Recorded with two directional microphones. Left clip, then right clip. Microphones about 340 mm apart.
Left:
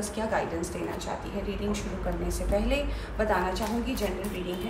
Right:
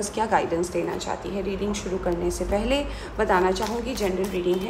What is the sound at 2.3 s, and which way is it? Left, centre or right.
A woman's voice, right.